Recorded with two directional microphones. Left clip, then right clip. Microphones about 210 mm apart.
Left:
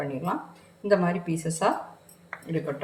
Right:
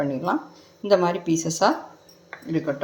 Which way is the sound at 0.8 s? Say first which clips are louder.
Right 4 dB; 30° right (ahead or behind).